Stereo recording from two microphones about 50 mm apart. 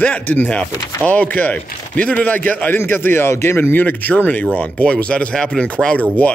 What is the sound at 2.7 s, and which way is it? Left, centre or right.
Speech, left.